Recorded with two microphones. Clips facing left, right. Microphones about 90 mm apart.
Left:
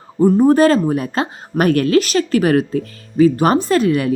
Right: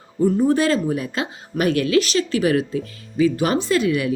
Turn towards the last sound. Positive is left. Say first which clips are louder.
# left 4 dB
turn(degrees=40)  # may be behind; listen again after turning